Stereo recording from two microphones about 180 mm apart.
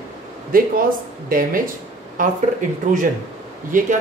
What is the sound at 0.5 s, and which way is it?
Speech, 50° right (ahead or behind).